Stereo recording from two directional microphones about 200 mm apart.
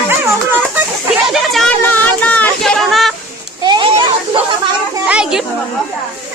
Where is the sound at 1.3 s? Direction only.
Centre (ahead or behind).